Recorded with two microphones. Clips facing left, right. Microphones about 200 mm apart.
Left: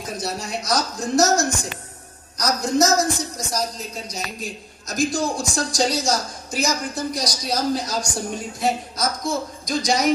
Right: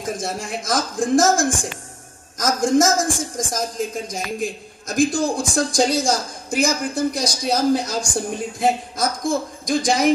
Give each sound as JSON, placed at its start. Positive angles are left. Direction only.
{"t": 0.0, "sound": "a woman's voice", "side_deg": -50}